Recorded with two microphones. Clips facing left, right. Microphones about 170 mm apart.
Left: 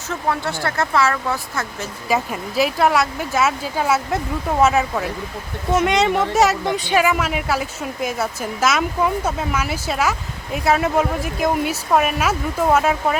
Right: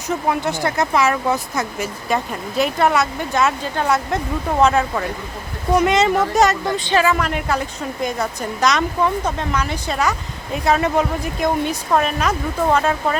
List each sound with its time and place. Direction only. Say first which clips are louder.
0.1 s speech: right 3 dB; 15° right (ahead or behind)
2.0 s speech: left 2 dB; 5° left (ahead or behind)